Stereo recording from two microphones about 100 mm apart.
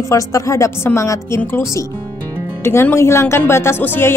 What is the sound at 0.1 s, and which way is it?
Speech, 30° left (ahead or behind).